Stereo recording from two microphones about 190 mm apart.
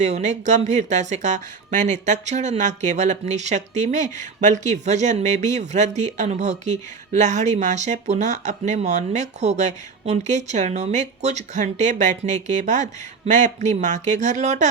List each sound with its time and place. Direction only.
0.0 s speech: 35° right (ahead or behind)